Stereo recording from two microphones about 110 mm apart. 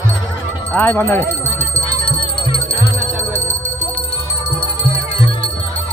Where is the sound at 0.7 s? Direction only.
20° left (ahead or behind).